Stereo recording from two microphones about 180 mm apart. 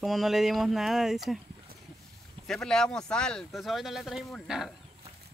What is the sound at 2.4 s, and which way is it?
Speech, 5° left (ahead or behind).